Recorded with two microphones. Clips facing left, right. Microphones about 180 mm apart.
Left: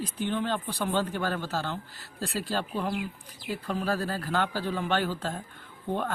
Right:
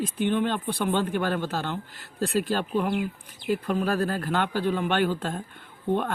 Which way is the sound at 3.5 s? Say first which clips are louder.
Right 5 dB; 55° right (ahead or behind).